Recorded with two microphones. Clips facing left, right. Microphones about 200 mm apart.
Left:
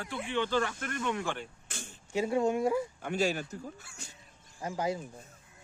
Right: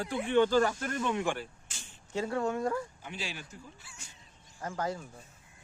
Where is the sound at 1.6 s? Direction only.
55° left (ahead or behind).